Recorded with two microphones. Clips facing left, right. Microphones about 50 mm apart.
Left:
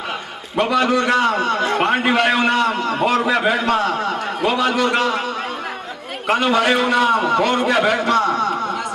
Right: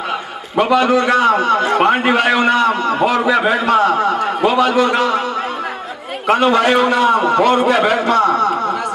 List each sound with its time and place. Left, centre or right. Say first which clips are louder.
0.5 s a man's voice: right 4 dB; centre
6.2 s a man's voice: right 4 dB; centre